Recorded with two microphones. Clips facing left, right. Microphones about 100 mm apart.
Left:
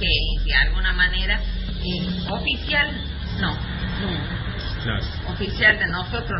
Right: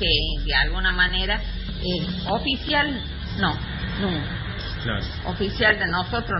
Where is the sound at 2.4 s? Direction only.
25° right (ahead or behind).